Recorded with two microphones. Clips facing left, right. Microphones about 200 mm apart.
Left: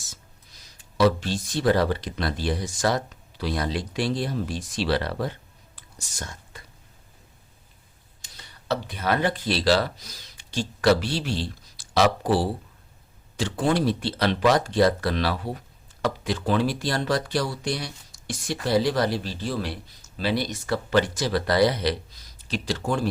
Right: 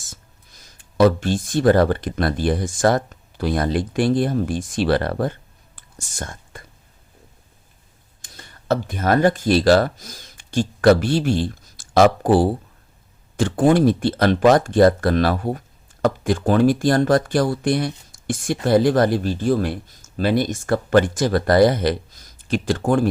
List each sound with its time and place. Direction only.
0.0 s speech: 50° right (ahead or behind)
8.2 s speech: 50° right (ahead or behind)